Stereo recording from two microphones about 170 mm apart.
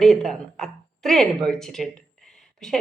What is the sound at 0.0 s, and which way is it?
A woman's voice, centre (ahead or behind).